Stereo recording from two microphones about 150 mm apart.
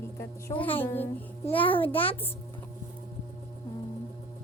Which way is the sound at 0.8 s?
15° left (ahead or behind).